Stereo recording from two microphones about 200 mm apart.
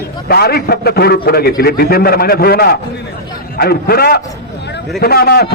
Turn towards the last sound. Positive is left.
turn(degrees=50)  # may be behind; listen again after turning